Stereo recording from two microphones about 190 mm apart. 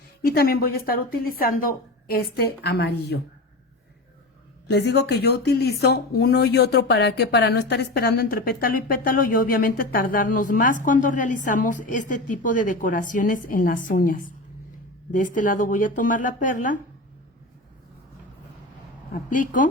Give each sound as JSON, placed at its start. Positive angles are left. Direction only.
{"t": 0.2, "sound": "speech", "side_deg": 50}
{"t": 4.7, "sound": "speech", "side_deg": 60}
{"t": 19.1, "sound": "speech", "side_deg": 45}